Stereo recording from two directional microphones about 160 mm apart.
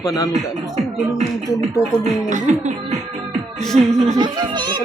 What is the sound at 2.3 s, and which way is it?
Music, 50° right (ahead or behind).